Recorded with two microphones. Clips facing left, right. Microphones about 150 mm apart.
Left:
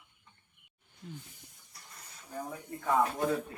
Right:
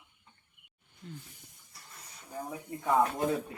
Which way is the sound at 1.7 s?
Centre (ahead or behind).